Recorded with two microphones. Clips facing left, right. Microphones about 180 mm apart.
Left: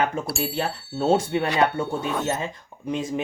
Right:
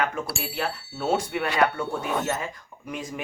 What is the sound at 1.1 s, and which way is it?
Speech, 25° left (ahead or behind).